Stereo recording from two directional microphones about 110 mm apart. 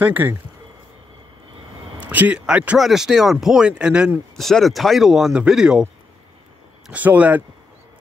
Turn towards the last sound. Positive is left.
turn(degrees=-15)  # may be behind; listen again after turning